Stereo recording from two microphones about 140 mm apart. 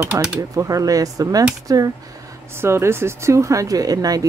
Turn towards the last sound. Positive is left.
turn(degrees=-25)  # may be behind; listen again after turning